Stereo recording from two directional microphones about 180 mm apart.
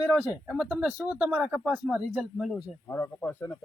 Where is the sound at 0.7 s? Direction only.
10° right (ahead or behind).